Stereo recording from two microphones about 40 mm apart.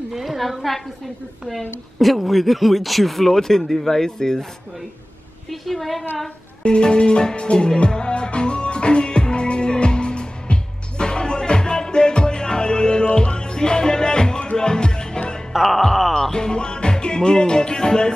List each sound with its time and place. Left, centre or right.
0.1 s speech: centre
2.0 s speech: centre
5.5 s speech: centre
6.6 s music: left
15.5 s music: centre
16.2 s music: centre